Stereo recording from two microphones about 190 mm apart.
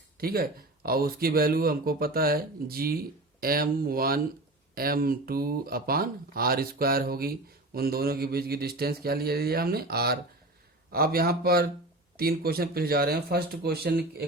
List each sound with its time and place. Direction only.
0.2 s speech: 50° right (ahead or behind)